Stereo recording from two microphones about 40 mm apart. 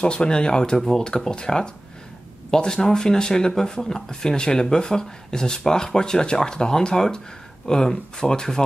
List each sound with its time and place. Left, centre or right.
0.0 s speech: left